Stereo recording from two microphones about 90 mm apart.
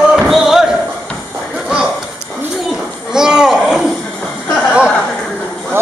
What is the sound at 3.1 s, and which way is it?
Boat, 5° right (ahead or behind).